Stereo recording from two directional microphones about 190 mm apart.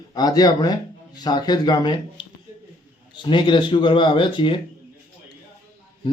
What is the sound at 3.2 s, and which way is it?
Speech, 25° left (ahead or behind).